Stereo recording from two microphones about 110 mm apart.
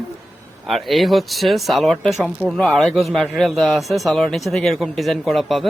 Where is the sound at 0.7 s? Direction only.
Centre (ahead or behind).